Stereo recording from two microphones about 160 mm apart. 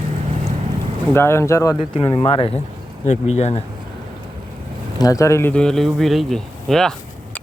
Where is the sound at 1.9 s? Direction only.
40° left (ahead or behind).